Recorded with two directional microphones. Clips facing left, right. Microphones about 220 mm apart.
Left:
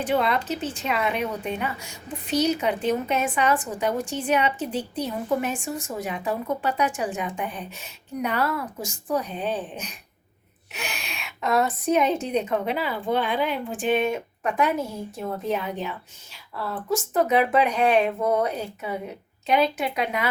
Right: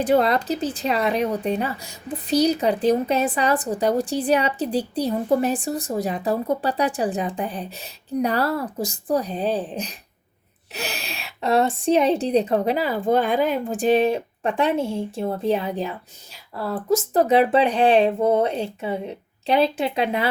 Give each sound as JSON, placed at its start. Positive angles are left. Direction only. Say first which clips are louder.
{"t": 0.0, "sound": "a woman's voice", "louder": "right 5 dB", "side_deg": -40}